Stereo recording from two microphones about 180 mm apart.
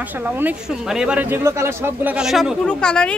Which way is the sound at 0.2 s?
10° right (ahead or behind).